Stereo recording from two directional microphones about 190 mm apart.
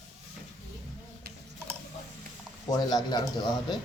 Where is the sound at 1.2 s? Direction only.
60° right (ahead or behind).